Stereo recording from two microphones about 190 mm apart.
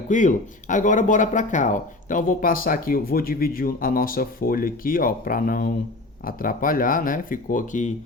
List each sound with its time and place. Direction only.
0.1 s speech: 40° left (ahead or behind)